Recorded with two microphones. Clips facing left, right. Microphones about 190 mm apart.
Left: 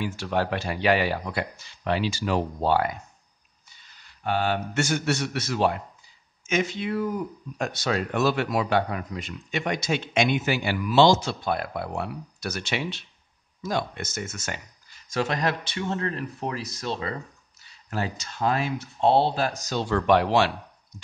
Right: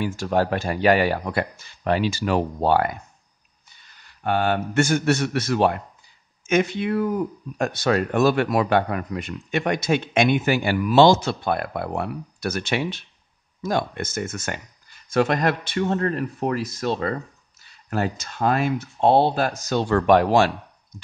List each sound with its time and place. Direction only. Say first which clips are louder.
0.0 s speech: right 4 dB; 45° right (ahead or behind)